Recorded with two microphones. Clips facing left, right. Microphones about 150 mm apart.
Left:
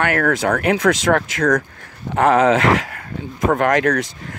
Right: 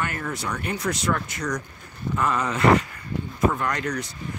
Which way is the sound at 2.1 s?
75° left (ahead or behind).